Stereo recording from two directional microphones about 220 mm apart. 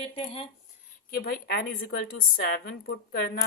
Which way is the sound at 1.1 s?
45° left (ahead or behind).